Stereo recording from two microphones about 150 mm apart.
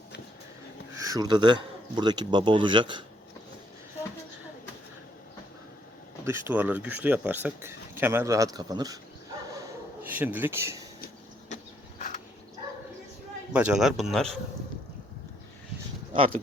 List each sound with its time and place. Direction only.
0.9 s speech: 25° right (ahead or behind)
6.2 s speech: 15° right (ahead or behind)
10.0 s speech: 10° right (ahead or behind)
11.0 s vehicle: 55° left (ahead or behind)
13.5 s speech: 10° right (ahead or behind)